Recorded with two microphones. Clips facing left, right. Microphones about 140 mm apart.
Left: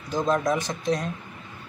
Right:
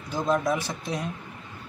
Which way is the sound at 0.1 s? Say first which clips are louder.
Left 1 dB; 5° right (ahead or behind).